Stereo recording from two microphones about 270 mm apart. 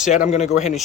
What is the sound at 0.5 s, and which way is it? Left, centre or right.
Speech, centre.